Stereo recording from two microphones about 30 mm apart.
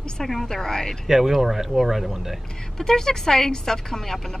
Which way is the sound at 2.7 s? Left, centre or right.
Centre.